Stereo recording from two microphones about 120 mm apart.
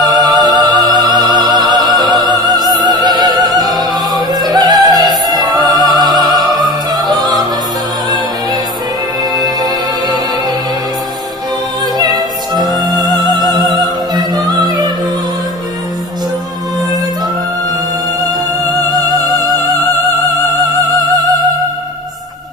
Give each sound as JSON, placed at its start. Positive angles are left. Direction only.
{"t": 0.0, "sound": "opera", "side_deg": -35}
{"t": 9.3, "sound": "music", "side_deg": -35}
{"t": 12.6, "sound": "music", "side_deg": -35}
{"t": 13.7, "sound": "opera", "side_deg": -35}
{"t": 18.2, "sound": "music", "side_deg": -35}